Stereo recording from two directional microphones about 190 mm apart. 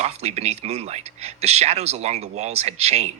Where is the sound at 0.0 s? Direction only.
35° right (ahead or behind).